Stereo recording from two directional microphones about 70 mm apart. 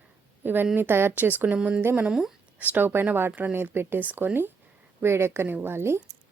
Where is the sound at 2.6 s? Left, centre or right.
Right.